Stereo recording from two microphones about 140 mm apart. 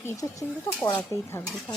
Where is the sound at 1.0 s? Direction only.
10° left (ahead or behind).